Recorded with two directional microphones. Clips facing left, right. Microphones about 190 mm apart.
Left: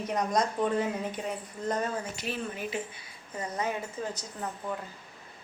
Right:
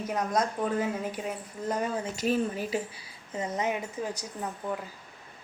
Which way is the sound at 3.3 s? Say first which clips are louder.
Right 2 dB; 20° right (ahead or behind).